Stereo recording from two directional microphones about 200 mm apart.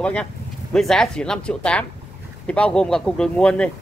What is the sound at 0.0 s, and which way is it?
Speech, 5° left (ahead or behind).